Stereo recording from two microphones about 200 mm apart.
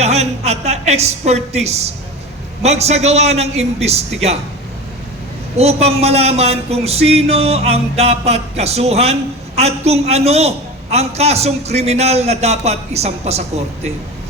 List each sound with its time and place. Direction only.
0.0 s a woman's voice: 30° right (ahead or behind)
5.5 s speech: 30° right (ahead or behind)